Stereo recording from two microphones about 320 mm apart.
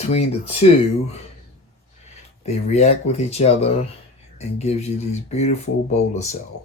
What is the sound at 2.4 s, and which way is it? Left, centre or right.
Speech, centre.